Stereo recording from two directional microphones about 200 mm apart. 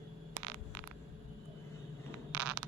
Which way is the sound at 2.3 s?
5° right (ahead or behind).